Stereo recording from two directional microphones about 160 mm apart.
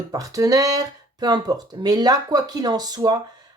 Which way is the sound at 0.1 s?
20° right (ahead or behind).